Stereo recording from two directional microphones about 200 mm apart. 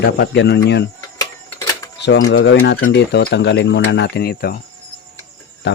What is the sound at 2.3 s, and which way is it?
Speech, 65° left (ahead or behind).